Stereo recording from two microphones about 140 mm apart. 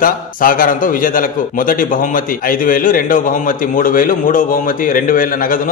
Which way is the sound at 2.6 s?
85° left.